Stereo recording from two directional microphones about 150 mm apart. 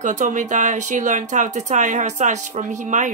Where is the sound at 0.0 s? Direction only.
55° right (ahead or behind).